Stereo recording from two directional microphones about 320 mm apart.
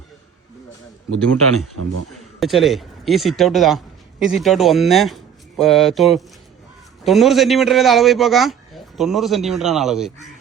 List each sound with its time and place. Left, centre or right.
1.5 s speech: right
2.1 s a man's voice: centre